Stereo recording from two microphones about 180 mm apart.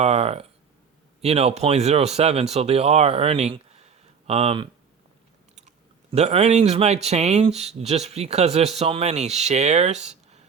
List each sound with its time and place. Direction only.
0.0 s speech: 35° right (ahead or behind)